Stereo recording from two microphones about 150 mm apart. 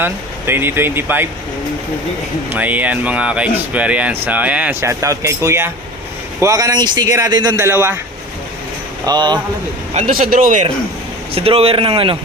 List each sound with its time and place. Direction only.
0.0 s speech: 15° right (ahead or behind)
2.5 s speech: 10° right (ahead or behind)
9.0 s speech: 30° right (ahead or behind)
9.9 s speech: 60° right (ahead or behind)
11.3 s speech: 40° right (ahead or behind)